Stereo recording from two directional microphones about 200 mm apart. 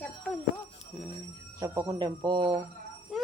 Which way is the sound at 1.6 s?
15° right (ahead or behind).